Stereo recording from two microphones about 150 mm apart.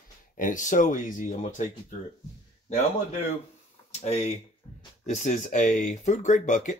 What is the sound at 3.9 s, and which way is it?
Speech, 45° left (ahead or behind).